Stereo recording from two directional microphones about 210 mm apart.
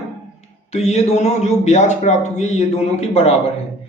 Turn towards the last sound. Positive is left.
turn(degrees=30)  # may be behind; listen again after turning